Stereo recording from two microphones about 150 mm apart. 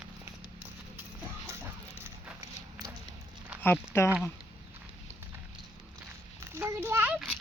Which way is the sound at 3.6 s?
15° left (ahead or behind).